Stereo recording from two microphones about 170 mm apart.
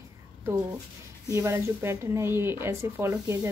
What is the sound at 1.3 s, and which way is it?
Speech, 15° right (ahead or behind).